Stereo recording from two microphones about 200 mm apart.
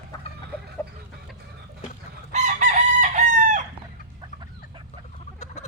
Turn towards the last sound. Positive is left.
turn(degrees=35)  # may be behind; listen again after turning